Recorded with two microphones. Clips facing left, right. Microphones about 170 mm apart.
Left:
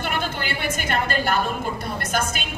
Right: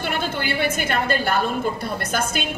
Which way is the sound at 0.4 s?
50° left (ahead or behind).